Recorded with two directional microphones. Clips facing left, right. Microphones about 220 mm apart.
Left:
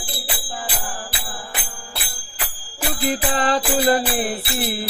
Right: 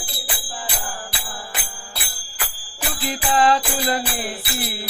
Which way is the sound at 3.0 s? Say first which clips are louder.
Right 2 dB; 40° left (ahead or behind).